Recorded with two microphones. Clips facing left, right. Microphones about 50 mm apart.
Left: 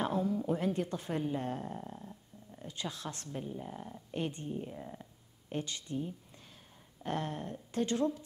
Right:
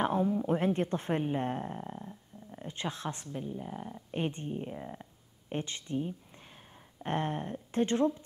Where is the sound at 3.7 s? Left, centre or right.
Centre.